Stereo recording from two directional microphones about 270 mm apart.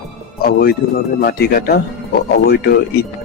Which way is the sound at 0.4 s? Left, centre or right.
Left.